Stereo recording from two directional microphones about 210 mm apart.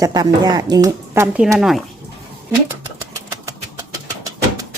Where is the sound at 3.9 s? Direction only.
15° right (ahead or behind).